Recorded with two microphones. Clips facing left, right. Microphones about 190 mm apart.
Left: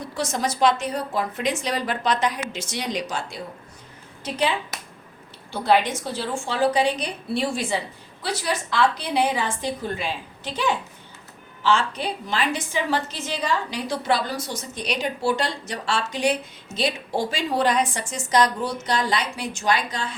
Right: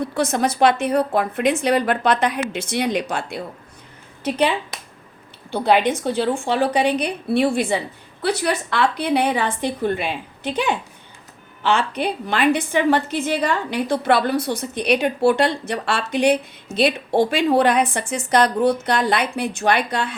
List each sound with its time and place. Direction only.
0.1 s a woman's voice: 60° right (ahead or behind)